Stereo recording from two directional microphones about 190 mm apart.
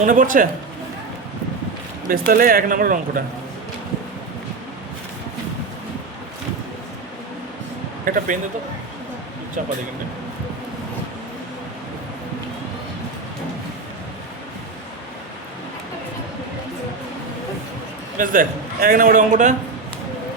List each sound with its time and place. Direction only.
0.0 s a man's voice: 45° right (ahead or behind)
2.0 s a man's voice: 50° right (ahead or behind)
8.0 s speech: 45° right (ahead or behind)
18.2 s a man's voice: 45° right (ahead or behind)